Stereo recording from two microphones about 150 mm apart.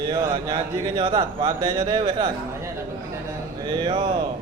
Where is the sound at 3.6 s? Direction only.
30° right (ahead or behind).